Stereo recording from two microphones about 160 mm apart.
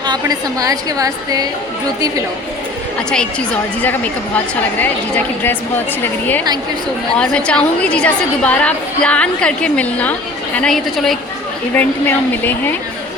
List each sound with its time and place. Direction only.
0.0 s a woman's voice: 25° right (ahead or behind)
3.1 s a woman's voice: 5° left (ahead or behind)
7.2 s a woman's voice: 5° left (ahead or behind)